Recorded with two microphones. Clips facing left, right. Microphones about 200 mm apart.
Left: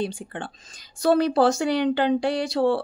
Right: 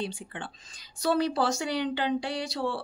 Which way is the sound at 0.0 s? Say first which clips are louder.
Left 6 dB; 50° left (ahead or behind).